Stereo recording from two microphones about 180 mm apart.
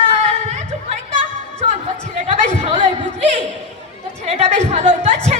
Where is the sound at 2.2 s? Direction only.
40° right (ahead or behind).